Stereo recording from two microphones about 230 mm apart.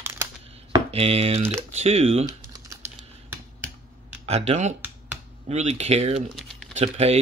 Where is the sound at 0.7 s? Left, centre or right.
Right.